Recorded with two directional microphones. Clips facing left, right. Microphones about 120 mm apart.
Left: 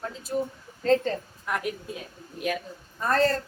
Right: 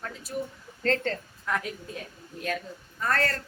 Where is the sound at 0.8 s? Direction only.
15° left (ahead or behind).